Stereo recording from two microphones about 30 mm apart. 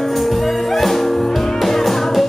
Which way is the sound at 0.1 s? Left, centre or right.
Centre.